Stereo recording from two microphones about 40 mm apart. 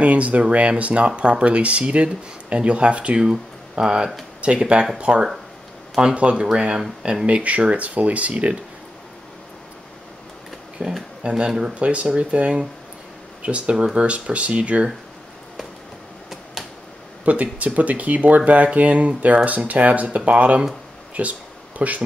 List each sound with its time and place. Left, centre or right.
0.0 s speech: right; by 4.1 s centre
4.4 s speech: right
10.8 s speech: right
11.2 s speech: right
11.7 s speech: right
17.2 s speech: right
21.1 s a sound: right